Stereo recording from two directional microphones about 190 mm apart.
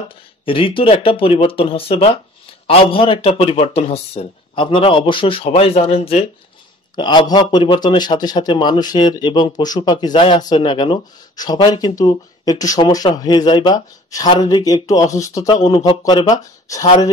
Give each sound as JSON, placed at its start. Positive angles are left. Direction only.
{"t": 0.5, "sound": "a man's voice", "side_deg": 25}